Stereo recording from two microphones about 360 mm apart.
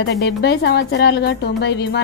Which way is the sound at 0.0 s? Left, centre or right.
Left.